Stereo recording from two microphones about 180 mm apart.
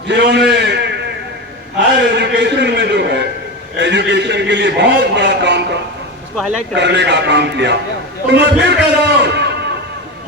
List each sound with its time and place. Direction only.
0.1 s a man's voice: 75° right (ahead or behind)
2.0 s a man's voice: 75° right (ahead or behind)
6.3 s speech: centre (ahead or behind)
6.7 s a man's voice: 75° right (ahead or behind)
8.3 s a sound: 75° right (ahead or behind)